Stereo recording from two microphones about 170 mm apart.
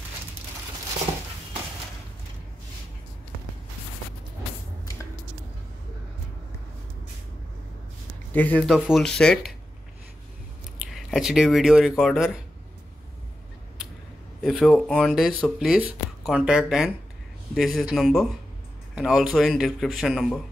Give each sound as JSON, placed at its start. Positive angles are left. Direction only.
{"t": 8.3, "sound": "speech", "side_deg": 10}
{"t": 10.9, "sound": "speech", "side_deg": 0}
{"t": 14.4, "sound": "speech", "side_deg": 0}